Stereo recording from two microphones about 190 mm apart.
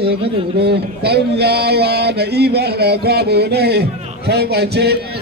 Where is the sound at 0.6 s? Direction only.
60° right (ahead or behind).